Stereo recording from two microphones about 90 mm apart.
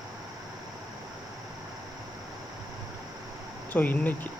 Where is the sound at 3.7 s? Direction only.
20° left (ahead or behind).